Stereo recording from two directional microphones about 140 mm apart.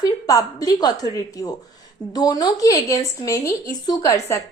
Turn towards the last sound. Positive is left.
turn(degrees=20)  # may be behind; listen again after turning